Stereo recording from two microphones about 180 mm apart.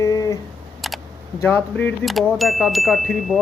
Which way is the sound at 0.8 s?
Centre (ahead or behind).